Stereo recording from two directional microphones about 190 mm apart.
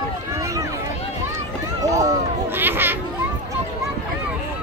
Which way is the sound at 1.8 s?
15° right (ahead or behind).